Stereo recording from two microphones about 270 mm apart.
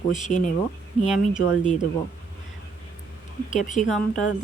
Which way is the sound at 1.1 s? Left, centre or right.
Centre.